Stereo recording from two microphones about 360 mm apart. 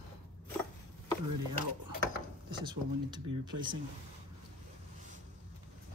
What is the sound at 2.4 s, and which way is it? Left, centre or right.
Speech, centre.